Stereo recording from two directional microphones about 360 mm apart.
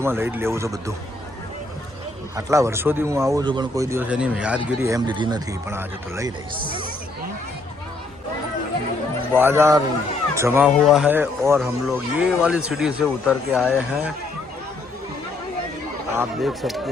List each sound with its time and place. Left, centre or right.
0.0 s speech: centre
2.3 s speech: centre
9.3 s speech: centre
16.1 s speech: centre